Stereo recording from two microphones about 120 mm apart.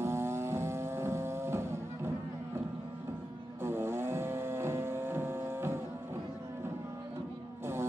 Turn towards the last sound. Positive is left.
turn(degrees=-20)  # may be behind; listen again after turning